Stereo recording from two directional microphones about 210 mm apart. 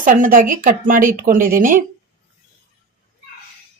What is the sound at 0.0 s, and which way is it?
A woman's voice, 40° right (ahead or behind).